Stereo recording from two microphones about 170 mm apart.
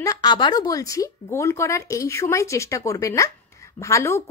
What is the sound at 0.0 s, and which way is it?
Speech, 20° left (ahead or behind).